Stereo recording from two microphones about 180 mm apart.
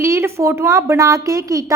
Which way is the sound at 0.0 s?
15° right (ahead or behind).